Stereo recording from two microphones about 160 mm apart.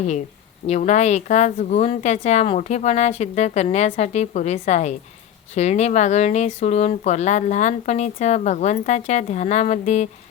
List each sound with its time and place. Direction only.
0.7 s speech: 45° left (ahead or behind)